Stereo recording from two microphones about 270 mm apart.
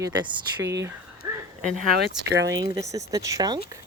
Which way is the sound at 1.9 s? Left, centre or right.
Right.